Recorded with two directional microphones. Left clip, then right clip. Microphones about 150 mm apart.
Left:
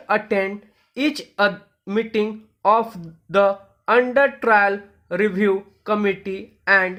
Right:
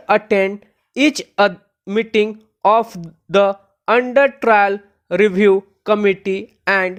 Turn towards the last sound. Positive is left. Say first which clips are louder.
# even
turn(degrees=-55)  # may be behind; listen again after turning